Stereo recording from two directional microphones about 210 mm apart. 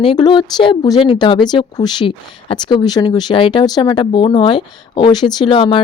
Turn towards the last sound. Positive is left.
turn(degrees=25)  # may be behind; listen again after turning